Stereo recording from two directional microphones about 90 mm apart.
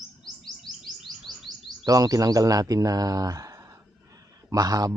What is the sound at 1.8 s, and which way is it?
Speech, 40° right (ahead or behind).